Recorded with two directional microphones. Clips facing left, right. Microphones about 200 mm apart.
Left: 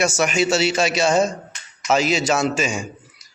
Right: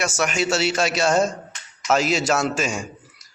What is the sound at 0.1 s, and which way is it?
A man's voice, centre (ahead or behind).